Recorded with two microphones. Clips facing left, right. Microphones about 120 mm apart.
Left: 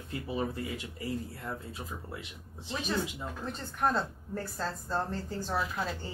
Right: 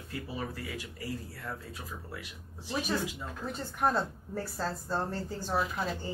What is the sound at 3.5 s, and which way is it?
A woman's voice, 5° right (ahead or behind).